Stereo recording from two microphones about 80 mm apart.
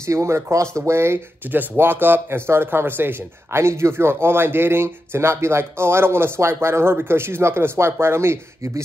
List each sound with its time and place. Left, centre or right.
0.0 s speech: right